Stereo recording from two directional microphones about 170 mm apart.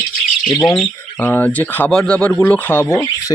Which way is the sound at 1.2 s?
10° left (ahead or behind).